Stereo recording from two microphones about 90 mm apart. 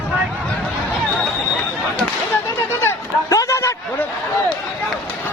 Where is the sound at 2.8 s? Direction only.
35° left (ahead or behind).